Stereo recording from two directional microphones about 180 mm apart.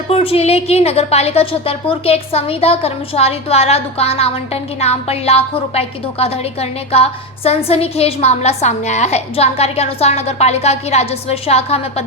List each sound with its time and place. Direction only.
0.1 s a woman's voice: 30° left (ahead or behind)